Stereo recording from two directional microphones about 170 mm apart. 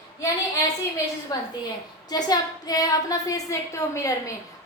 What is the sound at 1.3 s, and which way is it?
A woman's voice, 20° left (ahead or behind).